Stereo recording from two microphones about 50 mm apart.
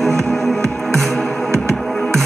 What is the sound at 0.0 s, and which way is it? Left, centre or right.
Music, centre.